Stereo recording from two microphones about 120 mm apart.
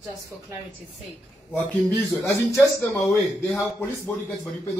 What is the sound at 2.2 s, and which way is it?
Speech, 25° left (ahead or behind).